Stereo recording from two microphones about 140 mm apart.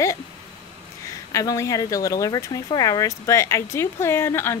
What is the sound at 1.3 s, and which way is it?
Speech, 25° left (ahead or behind).